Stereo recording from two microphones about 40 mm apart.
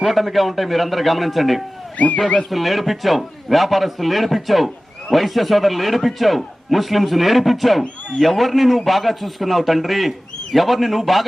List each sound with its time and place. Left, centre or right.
0.0 s a man's voice: centre
2.0 s speech: left
2.5 s a man's voice: centre